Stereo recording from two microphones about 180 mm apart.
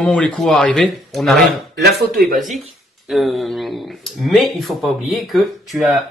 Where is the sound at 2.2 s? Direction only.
45° right (ahead or behind).